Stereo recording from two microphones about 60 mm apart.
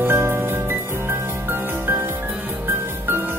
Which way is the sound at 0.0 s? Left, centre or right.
Right.